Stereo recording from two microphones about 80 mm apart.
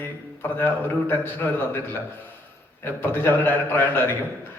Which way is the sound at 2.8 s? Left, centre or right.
Left.